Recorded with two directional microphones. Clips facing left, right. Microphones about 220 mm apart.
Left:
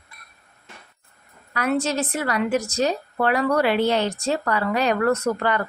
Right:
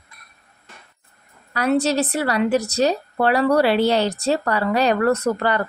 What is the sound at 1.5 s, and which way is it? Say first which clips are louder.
A woman's voice: right 4 dB; 35° right (ahead or behind).